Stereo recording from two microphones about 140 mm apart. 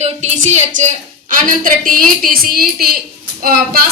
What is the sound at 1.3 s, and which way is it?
A woman's voice, 70° right (ahead or behind).